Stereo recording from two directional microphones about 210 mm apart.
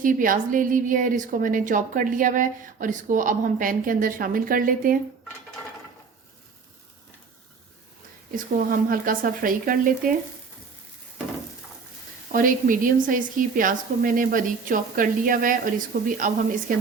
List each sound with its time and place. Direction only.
0.0 s a woman's voice: 40° right (ahead or behind)
8.7 s a woman's voice: 45° right (ahead or behind)
12.3 s a woman's voice: 40° right (ahead or behind)